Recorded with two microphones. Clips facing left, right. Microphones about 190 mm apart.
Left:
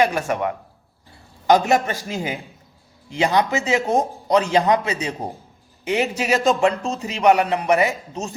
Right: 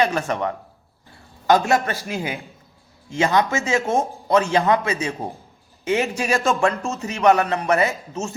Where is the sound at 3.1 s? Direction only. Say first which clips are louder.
Even; 15° left (ahead or behind).